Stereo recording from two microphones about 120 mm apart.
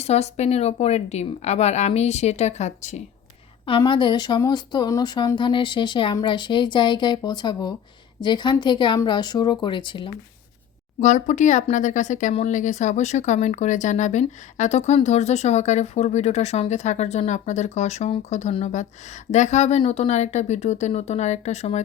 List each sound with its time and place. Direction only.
0.0 s a woman's voice: 65° left (ahead or behind)
3.7 s speech: 40° left (ahead or behind)
11.0 s a woman's voice: 90° left; by 21.8 s 65° left (ahead or behind)